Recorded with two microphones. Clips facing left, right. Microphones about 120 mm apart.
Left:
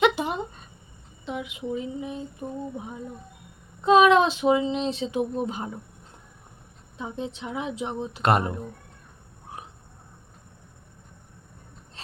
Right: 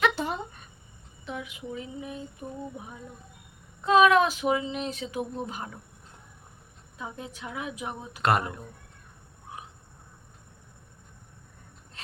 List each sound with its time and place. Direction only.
0.0 s a sound: 15° left (ahead or behind)
1.2 s speech: 20° left (ahead or behind)
6.9 s speech: 25° left (ahead or behind)